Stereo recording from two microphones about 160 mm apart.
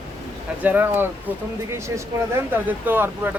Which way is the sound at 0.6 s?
10° right (ahead or behind).